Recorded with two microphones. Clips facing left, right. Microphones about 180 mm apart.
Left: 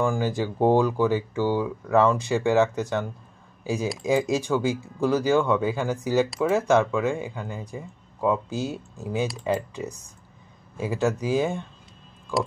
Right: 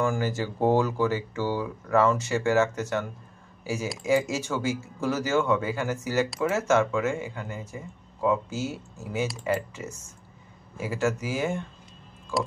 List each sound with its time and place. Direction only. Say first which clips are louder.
0.0 s speech: left 2 dB; 15° left (ahead or behind)
10.8 s speech: left 2 dB; 15° left (ahead or behind)